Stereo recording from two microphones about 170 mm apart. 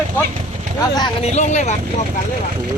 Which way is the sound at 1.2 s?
40° left (ahead or behind).